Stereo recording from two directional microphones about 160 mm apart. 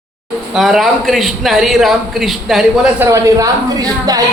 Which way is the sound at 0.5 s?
Centre (ahead or behind).